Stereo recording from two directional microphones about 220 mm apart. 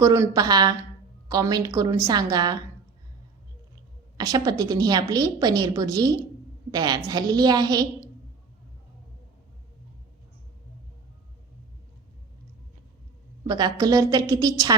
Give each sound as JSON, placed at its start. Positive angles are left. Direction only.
{"t": 0.0, "sound": "a woman's voice", "side_deg": -15}
{"t": 4.2, "sound": "a woman's voice", "side_deg": -15}
{"t": 13.5, "sound": "a woman's voice", "side_deg": -15}